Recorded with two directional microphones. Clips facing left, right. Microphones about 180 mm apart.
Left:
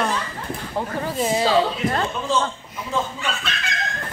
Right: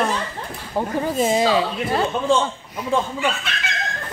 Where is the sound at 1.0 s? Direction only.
20° right (ahead or behind).